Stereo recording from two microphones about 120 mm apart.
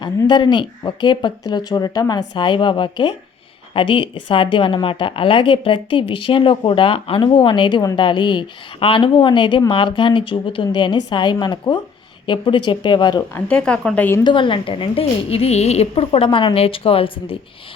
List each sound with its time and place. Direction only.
0.0 s a woman's voice: 40° left (ahead or behind)
13.3 s speech: 10° left (ahead or behind)
14.3 s a woman's voice: 45° left (ahead or behind)